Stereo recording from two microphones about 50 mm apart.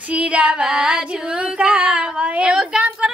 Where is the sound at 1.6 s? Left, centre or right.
Centre.